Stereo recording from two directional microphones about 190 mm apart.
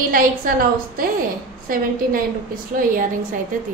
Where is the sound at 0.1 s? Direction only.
50° right (ahead or behind).